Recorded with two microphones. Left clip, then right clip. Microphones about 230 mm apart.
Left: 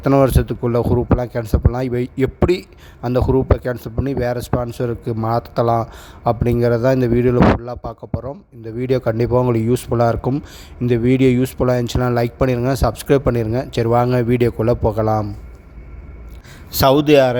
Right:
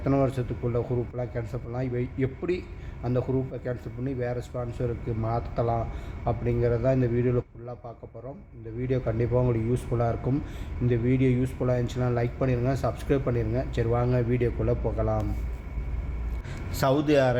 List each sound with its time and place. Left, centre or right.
0.0 s speech: left
16.7 s a man's voice: left